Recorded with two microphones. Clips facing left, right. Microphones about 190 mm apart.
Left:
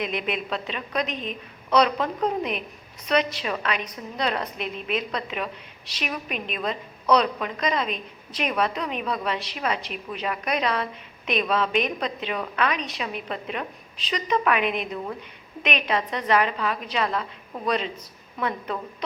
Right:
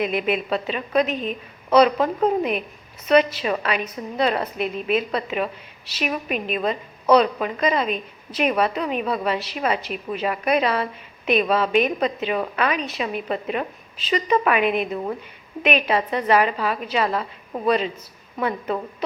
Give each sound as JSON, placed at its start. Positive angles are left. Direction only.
{"t": 0.0, "sound": "a woman's voice", "side_deg": -5}